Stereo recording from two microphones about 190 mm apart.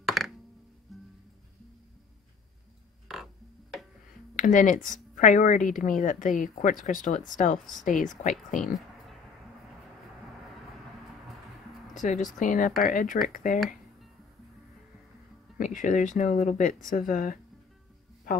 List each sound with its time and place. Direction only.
0.0 s music: centre (ahead or behind)
4.4 s a woman's voice: 45° left (ahead or behind)
11.9 s a woman's voice: 40° left (ahead or behind)
15.5 s speech: 45° left (ahead or behind)